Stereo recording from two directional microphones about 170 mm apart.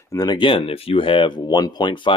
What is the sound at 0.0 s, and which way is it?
Speech, 20° left (ahead or behind).